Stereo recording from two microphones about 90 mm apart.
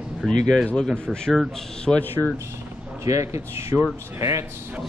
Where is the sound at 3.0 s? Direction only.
35° right (ahead or behind).